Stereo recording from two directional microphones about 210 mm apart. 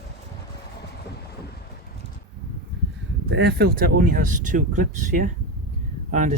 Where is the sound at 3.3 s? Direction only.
50° right (ahead or behind).